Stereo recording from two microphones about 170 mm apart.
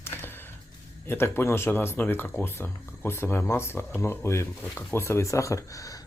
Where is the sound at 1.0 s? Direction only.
15° left (ahead or behind).